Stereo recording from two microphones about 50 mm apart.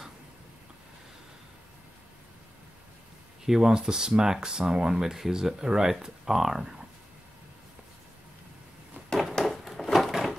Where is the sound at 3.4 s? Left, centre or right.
Centre.